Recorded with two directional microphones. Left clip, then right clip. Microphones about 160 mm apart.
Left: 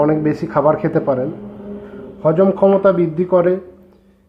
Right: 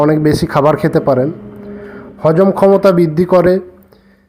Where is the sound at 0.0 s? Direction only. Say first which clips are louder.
Right 4 dB; 30° right (ahead or behind).